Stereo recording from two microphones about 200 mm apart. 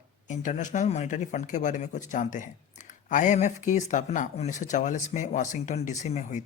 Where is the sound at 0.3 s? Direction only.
40° left (ahead or behind).